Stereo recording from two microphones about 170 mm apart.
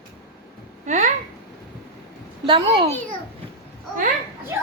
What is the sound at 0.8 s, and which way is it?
Speech, 45° right (ahead or behind).